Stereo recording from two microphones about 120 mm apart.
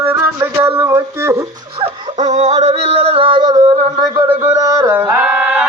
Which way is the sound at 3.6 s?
60° right (ahead or behind).